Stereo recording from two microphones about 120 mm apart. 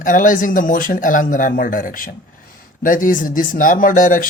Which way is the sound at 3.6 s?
90° left.